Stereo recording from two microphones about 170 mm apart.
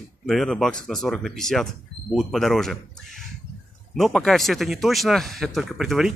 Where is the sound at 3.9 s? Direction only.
Centre (ahead or behind).